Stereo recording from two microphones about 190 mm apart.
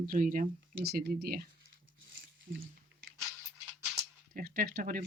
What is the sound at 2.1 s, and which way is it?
Squish, 75° right (ahead or behind).